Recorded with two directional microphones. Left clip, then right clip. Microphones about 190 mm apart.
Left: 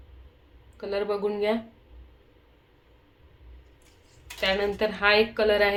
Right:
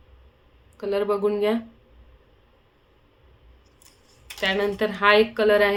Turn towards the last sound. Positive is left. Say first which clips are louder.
# right 3 dB
turn(degrees=-25)  # may be behind; listen again after turning